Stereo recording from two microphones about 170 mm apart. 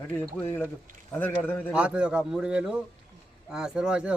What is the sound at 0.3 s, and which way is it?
A man's voice, 15° left (ahead or behind).